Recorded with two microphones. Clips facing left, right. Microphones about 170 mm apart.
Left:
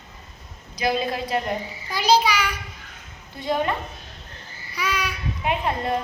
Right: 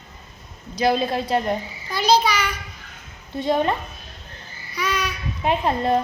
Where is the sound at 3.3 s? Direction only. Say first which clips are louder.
Right 4 dB; 25° right (ahead or behind).